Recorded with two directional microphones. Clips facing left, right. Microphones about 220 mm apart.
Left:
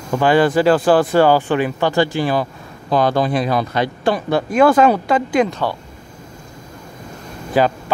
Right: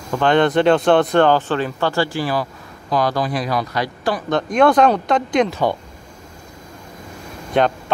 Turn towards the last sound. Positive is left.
turn(degrees=5)  # may be behind; listen again after turning